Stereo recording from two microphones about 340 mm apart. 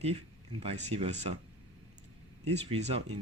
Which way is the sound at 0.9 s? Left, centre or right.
Centre.